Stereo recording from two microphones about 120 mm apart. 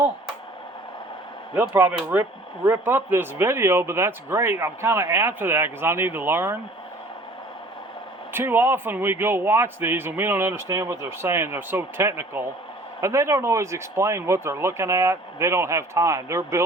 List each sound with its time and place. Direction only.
1.7 s a man's voice: 20° right (ahead or behind)
8.3 s a man's voice: 20° right (ahead or behind)